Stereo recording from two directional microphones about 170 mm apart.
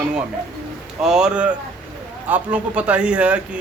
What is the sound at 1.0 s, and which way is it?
Speech, 5° right (ahead or behind).